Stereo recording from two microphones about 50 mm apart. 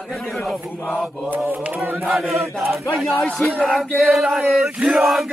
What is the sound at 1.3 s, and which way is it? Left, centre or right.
Speech, right.